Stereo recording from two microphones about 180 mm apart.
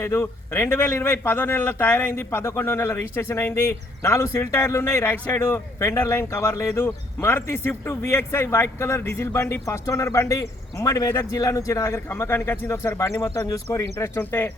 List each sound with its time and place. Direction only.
0.0 s speech: 15° left (ahead or behind)